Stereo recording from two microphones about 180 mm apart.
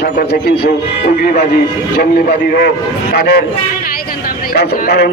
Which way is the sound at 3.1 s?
65° left (ahead or behind).